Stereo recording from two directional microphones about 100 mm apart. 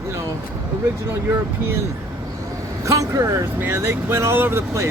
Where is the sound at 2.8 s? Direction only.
30° right (ahead or behind).